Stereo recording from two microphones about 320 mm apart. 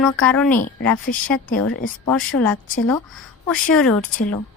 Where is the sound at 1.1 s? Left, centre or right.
Left.